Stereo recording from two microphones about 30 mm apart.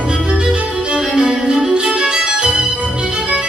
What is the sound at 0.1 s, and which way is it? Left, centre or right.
Music, right.